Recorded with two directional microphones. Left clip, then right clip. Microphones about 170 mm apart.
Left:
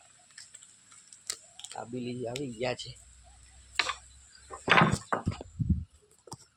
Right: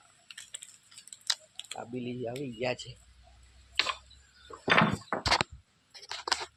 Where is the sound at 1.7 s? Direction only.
45° left (ahead or behind).